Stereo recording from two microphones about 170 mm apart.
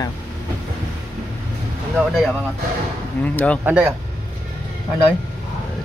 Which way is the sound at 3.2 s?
10° left (ahead or behind).